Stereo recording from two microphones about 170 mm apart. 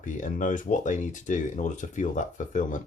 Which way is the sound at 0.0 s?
50° left (ahead or behind).